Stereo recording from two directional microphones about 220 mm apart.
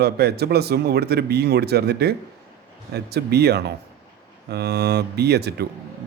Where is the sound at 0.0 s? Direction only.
45° right (ahead or behind).